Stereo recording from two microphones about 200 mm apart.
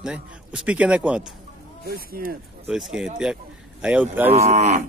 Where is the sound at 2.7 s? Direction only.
5° right (ahead or behind).